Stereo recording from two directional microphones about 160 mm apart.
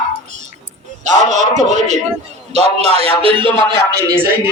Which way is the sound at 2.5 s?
40° right (ahead or behind).